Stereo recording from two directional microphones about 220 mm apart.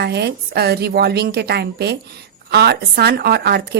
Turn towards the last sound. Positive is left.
turn(degrees=-45)  # may be behind; listen again after turning